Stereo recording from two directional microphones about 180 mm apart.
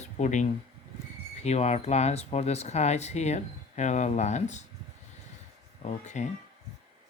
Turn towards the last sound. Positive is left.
turn(degrees=40)  # may be behind; listen again after turning